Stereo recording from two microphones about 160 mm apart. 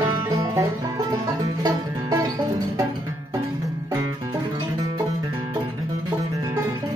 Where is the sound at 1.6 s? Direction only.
20° right (ahead or behind).